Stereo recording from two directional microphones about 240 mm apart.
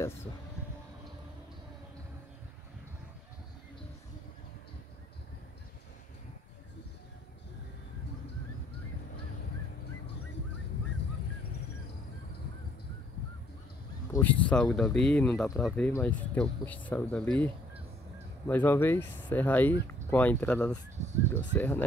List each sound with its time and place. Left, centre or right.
14.1 s speech: centre
18.5 s speech: centre
21.0 s a sound: right
21.5 s speech: centre